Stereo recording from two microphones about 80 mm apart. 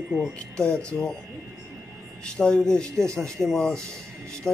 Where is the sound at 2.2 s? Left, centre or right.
Centre.